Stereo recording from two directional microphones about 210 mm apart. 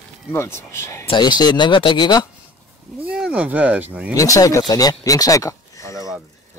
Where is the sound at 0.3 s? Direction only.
10° left (ahead or behind).